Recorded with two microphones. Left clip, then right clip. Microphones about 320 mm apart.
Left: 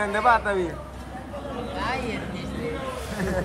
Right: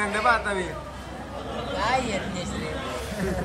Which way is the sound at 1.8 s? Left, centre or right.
Centre.